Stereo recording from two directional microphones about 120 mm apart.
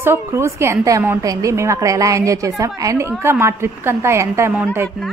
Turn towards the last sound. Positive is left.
turn(degrees=-20)  # may be behind; listen again after turning